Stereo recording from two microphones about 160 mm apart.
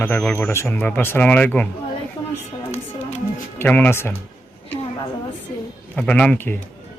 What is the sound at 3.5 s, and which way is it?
Speech, 10° left (ahead or behind).